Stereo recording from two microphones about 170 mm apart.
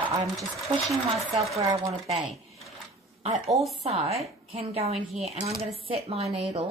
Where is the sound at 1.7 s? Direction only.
40° right (ahead or behind).